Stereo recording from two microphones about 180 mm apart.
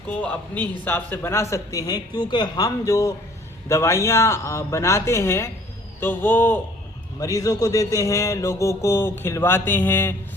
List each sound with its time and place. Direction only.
0.1 s a man's voice: 10° left (ahead or behind)